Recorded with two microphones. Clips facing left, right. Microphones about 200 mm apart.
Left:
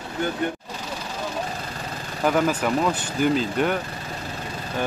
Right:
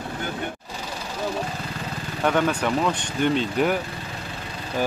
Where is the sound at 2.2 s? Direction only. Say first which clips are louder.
Left 1 dB; 5° left (ahead or behind).